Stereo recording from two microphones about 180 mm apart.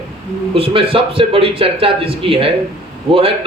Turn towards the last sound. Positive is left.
turn(degrees=-30)  # may be behind; listen again after turning